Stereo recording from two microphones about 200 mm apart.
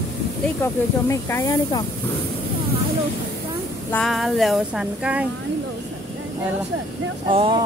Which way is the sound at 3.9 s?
Centre (ahead or behind).